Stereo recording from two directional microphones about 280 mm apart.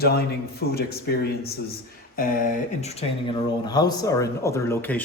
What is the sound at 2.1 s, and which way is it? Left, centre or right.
Speech, left.